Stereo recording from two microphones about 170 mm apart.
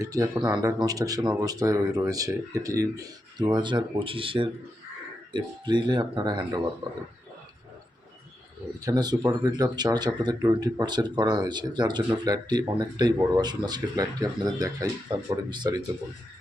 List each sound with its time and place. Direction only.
0.0 s speech: 20° right (ahead or behind)
8.8 s speech: 25° right (ahead or behind)